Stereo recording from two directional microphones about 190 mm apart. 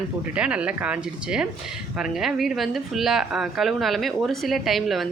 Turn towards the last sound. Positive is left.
turn(degrees=0)  # may be behind; listen again after turning